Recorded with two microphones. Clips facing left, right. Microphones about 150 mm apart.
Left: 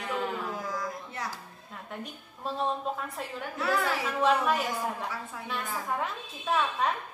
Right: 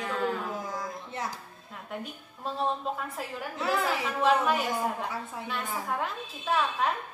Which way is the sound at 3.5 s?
20° right (ahead or behind).